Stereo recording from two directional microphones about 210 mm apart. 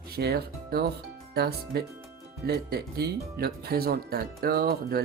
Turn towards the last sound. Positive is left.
turn(degrees=-45)  # may be behind; listen again after turning